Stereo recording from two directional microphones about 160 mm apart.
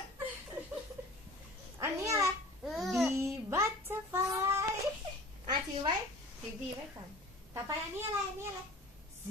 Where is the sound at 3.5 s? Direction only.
15° right (ahead or behind).